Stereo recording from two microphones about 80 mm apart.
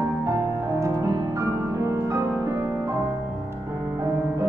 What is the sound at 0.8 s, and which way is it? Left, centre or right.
Music, right.